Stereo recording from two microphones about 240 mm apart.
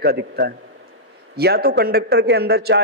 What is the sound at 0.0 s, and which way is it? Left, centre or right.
A man's voice, right.